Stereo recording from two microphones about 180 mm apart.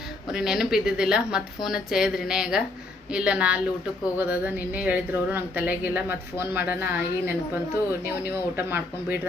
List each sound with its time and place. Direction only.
0.3 s a woman's voice: 5° right (ahead or behind)